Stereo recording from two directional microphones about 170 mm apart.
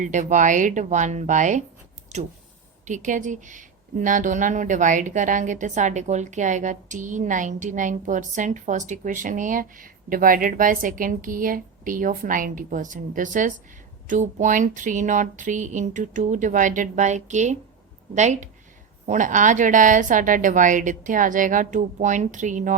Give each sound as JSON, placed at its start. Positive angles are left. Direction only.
{"t": 0.0, "sound": "speech", "side_deg": -45}
{"t": 2.8, "sound": "speech", "side_deg": -45}